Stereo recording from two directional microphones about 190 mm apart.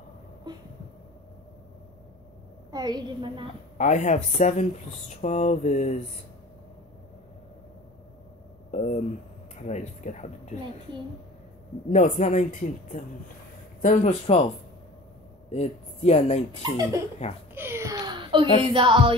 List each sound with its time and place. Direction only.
0.5 s a sound: 20° right (ahead or behind)
2.7 s a woman's voice: 20° right (ahead or behind)
3.7 s speech: 40° left (ahead or behind)
8.7 s speech: 40° left (ahead or behind)
11.9 s speech: 35° left (ahead or behind)
15.5 s speech: 35° left (ahead or behind)
17.6 s a sound: 15° right (ahead or behind)
18.7 s a woman's voice: 25° right (ahead or behind)